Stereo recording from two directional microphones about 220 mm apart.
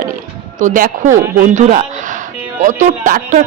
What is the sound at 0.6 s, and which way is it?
Speech, 35° right (ahead or behind).